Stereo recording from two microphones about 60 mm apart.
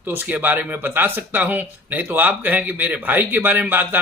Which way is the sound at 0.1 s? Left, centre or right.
Right.